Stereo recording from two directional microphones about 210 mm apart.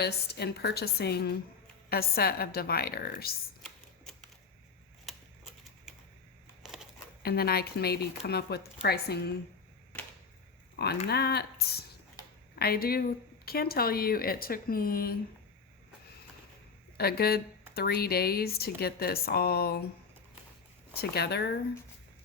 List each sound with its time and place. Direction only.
0.0 s speech: 50° left (ahead or behind)
6.6 s a sound: centre (ahead or behind)
7.2 s speech: 45° left (ahead or behind)
10.8 s speech: 50° left (ahead or behind)
12.5 s speech: 45° left (ahead or behind)
17.0 s speech: 50° left (ahead or behind)
20.9 s speech: 50° left (ahead or behind)